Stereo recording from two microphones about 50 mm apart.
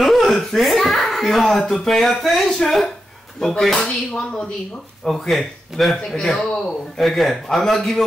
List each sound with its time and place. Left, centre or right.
0.0 s a child's voice: centre
5.0 s a man's voice: centre
6.3 s speech: centre
7.0 s a man's voice: centre